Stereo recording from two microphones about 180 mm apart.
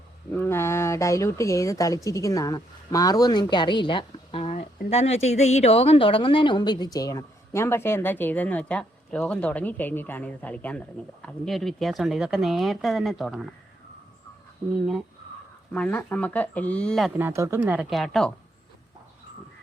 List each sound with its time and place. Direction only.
0.3 s a woman's voice: 15° left (ahead or behind)
15.7 s a woman's voice: 5° left (ahead or behind)
17.2 s speech: 15° right (ahead or behind); by 18.3 s 5° left (ahead or behind)